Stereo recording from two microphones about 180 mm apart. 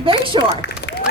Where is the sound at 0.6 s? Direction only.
70° left (ahead or behind).